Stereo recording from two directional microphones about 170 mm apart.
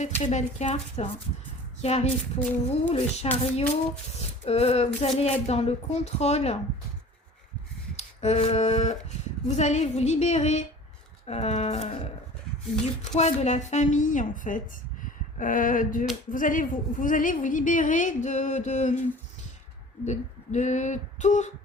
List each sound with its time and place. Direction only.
0.0 s a woman's voice: 45° left (ahead or behind)
7.9 s a sound: 40° left (ahead or behind)
9.5 s a woman's voice: 40° left (ahead or behind)
20.1 s a woman's voice: 45° left (ahead or behind)